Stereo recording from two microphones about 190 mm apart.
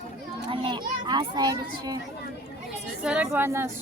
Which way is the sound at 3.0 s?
5° right (ahead or behind).